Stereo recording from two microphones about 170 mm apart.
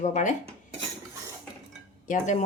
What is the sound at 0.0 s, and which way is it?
Speech, 45° left (ahead or behind).